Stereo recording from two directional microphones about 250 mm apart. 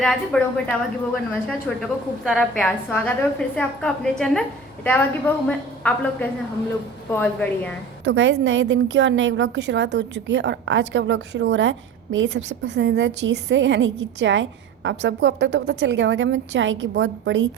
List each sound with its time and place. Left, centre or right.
0.0 s a woman's voice: centre
8.0 s a woman's voice: right